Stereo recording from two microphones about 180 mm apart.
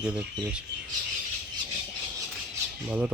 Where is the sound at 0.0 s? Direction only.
5° right (ahead or behind).